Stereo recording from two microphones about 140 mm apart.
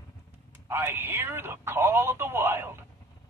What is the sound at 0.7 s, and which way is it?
Speech, 15° right (ahead or behind).